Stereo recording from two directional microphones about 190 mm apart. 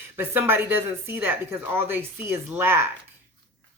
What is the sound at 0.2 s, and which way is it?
Speech, 10° right (ahead or behind).